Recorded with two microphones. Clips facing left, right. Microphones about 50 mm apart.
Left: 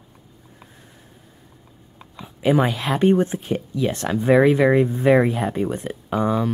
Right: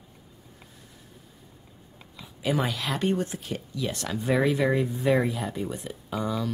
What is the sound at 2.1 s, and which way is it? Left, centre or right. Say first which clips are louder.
Speech: left 9 dB; left.